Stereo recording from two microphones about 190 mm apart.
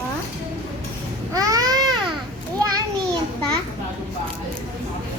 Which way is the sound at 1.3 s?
20° right (ahead or behind).